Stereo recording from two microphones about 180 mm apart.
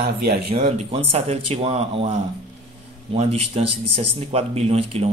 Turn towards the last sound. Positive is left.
turn(degrees=-35)  # may be behind; listen again after turning